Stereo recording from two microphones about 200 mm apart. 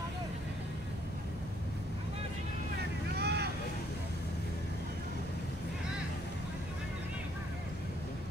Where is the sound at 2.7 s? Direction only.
55° right (ahead or behind).